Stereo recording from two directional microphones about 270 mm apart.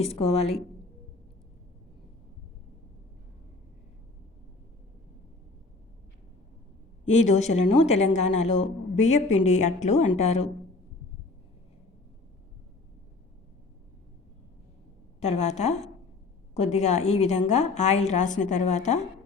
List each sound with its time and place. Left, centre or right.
0.0 s a woman's voice: left
7.0 s a woman's voice: left
15.2 s a woman's voice: left